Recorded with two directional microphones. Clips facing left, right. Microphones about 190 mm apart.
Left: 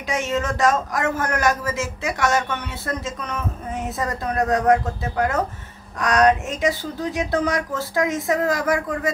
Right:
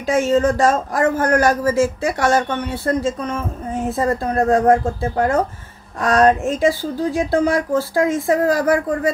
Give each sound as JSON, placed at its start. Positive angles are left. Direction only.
{"t": 0.0, "sound": "speech", "side_deg": -35}